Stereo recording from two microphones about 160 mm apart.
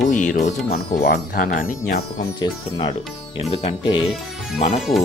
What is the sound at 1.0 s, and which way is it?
Speech, 90° left.